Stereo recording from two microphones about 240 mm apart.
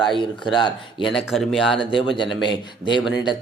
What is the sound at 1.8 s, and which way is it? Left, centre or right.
Speech, left.